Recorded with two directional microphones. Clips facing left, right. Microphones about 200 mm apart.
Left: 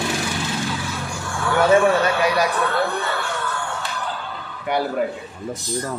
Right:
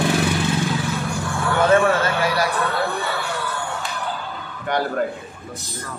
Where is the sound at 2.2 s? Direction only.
20° left (ahead or behind).